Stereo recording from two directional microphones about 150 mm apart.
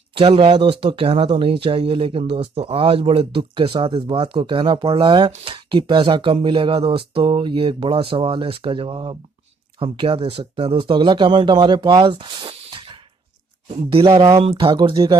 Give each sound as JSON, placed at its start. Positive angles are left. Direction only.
{"t": 0.1, "sound": "speech", "side_deg": -35}
{"t": 14.0, "sound": "speech", "side_deg": -25}
{"t": 14.4, "sound": "speech", "side_deg": -40}